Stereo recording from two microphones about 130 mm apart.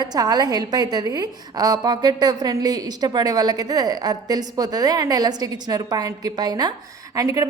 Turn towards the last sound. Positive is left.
turn(degrees=-25)  # may be behind; listen again after turning